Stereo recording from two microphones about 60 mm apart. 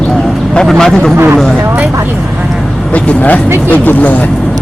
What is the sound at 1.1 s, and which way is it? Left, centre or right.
Speech, right.